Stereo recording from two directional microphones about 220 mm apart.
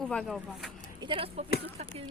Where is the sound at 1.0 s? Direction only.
25° right (ahead or behind).